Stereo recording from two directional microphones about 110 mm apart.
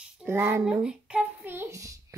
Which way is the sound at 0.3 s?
25° right (ahead or behind).